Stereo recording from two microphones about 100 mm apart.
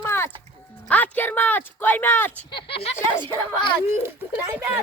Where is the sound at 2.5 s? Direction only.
65° left (ahead or behind).